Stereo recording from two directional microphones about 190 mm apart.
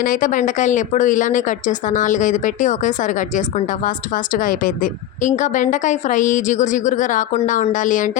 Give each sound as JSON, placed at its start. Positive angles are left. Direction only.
{"t": 0.0, "sound": "a woman's voice", "side_deg": 45}